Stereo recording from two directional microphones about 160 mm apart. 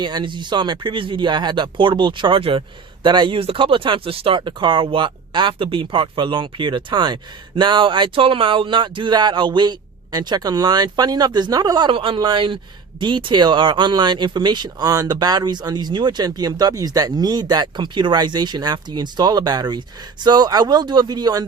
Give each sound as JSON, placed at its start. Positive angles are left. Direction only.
{"t": 0.0, "sound": "speech", "side_deg": -30}